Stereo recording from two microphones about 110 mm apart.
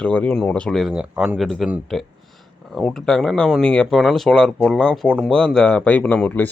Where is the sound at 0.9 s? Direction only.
10° right (ahead or behind).